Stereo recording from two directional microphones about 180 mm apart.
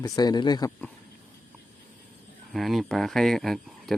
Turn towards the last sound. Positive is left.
turn(degrees=0)  # may be behind; listen again after turning